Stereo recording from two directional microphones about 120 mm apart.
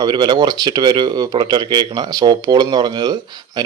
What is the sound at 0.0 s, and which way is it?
Speech, 35° right (ahead or behind).